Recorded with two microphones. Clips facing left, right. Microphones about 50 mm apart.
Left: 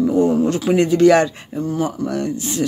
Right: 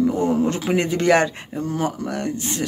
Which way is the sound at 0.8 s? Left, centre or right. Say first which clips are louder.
Left 5 dB; right.